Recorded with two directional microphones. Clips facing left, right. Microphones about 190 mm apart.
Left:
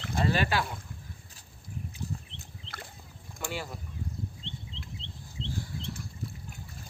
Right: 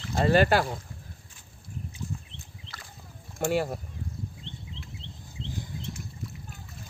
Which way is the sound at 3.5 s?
50° right (ahead or behind).